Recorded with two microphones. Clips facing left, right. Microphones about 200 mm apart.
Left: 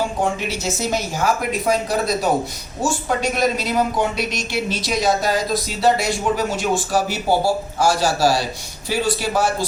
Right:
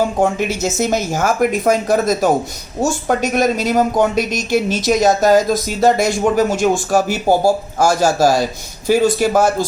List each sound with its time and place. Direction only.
0.2 s speech: 50° right (ahead or behind)